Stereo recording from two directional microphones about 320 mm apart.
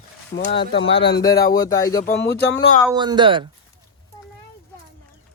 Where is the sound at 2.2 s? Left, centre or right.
Left.